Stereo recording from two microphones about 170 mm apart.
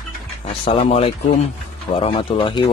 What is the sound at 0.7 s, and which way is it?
Speech, 35° left (ahead or behind).